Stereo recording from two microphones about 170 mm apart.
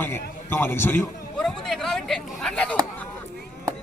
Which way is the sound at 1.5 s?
Centre (ahead or behind).